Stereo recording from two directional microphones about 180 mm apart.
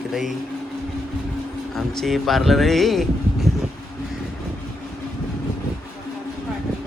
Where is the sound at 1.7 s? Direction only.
Centre (ahead or behind).